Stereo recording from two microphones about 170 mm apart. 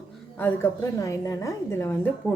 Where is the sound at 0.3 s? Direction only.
10° left (ahead or behind).